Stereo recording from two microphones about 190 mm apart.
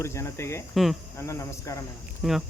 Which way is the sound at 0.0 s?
15° left (ahead or behind).